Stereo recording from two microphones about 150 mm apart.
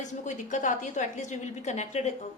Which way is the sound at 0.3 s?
55° left (ahead or behind).